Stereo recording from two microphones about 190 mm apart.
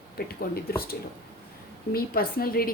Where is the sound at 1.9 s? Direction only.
50° left (ahead or behind).